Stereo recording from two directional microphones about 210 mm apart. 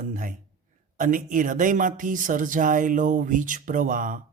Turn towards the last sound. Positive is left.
turn(degrees=-40)  # may be behind; listen again after turning